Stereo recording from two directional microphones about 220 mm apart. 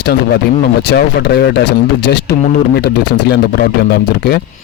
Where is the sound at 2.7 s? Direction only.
45° left (ahead or behind).